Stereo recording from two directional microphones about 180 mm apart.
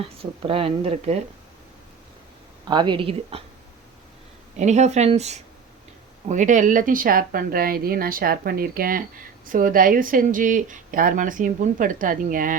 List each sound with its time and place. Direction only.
0.2 s a woman's voice: 30° right (ahead or behind)
2.6 s a woman's voice: 25° right (ahead or behind)
4.5 s a woman's voice: 40° right (ahead or behind)